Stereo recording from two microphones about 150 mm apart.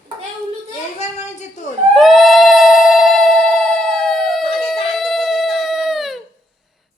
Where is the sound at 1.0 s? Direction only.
50° left (ahead or behind).